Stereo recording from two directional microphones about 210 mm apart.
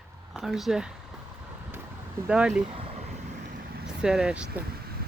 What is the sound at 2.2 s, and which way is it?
Speech, 5° right (ahead or behind).